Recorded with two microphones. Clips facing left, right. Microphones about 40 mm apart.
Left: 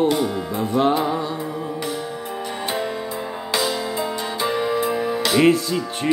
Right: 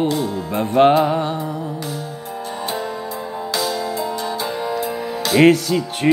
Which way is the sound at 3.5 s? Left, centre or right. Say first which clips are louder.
Even; left.